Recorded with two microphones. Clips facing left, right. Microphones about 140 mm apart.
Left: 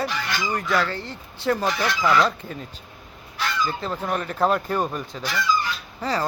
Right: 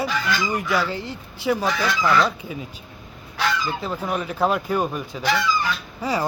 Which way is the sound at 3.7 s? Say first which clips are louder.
Right 1 dB; 5° right (ahead or behind).